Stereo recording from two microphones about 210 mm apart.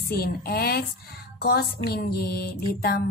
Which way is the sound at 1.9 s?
50° left (ahead or behind).